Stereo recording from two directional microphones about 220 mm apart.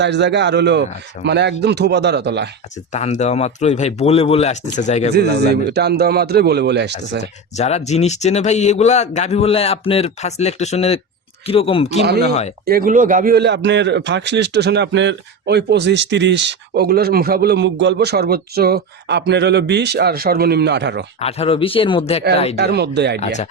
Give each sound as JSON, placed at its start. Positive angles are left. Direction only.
{"t": 0.0, "sound": "a man's voice", "side_deg": -50}
{"t": 2.9, "sound": "speech", "side_deg": 30}
{"t": 5.4, "sound": "a man's voice", "side_deg": -50}
{"t": 7.5, "sound": "speech", "side_deg": 30}
{"t": 12.6, "sound": "a man's voice", "side_deg": -40}
{"t": 21.2, "sound": "speech", "side_deg": 25}
{"t": 22.5, "sound": "a man's voice", "side_deg": -50}